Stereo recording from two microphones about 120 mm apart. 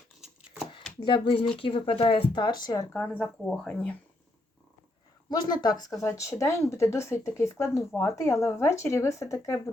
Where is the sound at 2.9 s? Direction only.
10° left (ahead or behind).